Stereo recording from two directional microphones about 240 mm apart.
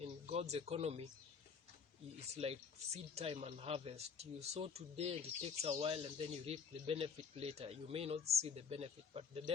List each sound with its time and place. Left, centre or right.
0.0 s speech: right
2.3 s speech: right